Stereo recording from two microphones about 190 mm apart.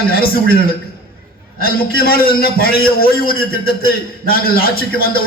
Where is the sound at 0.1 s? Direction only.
55° left (ahead or behind).